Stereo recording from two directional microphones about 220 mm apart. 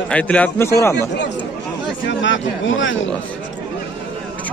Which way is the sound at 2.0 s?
55° left (ahead or behind).